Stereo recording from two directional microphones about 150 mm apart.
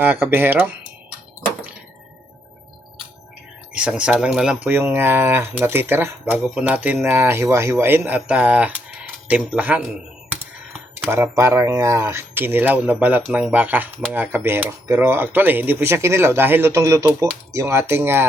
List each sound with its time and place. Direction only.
0.0 s speech: 15° right (ahead or behind)
3.8 s speech: 5° right (ahead or behind)
11.0 s speech: 15° right (ahead or behind)